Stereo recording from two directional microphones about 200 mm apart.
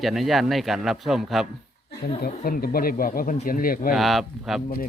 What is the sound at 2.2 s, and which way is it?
Speech, 45° left (ahead or behind).